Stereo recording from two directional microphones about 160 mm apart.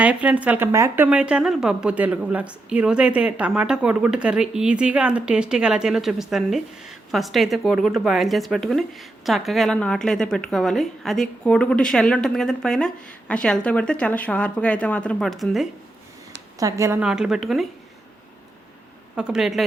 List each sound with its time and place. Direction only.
0.0 s speech: 10° right (ahead or behind)
16.6 s a woman's voice: 20° right (ahead or behind)
17.0 s speech: 5° right (ahead or behind)
19.1 s speech: 5° right (ahead or behind)